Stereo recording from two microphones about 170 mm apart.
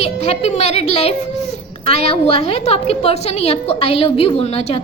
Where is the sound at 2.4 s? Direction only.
35° left (ahead or behind).